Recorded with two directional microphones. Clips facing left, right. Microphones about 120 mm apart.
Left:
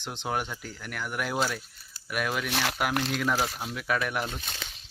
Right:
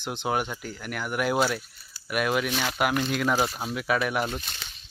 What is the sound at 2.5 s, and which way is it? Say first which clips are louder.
Speech: right 1 dB; 70° left (ahead or behind).